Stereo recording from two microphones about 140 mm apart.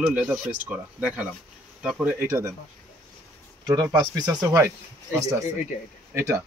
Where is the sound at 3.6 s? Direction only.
30° right (ahead or behind).